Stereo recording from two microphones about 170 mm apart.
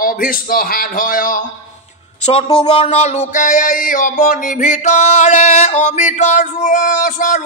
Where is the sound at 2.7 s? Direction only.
40° left (ahead or behind).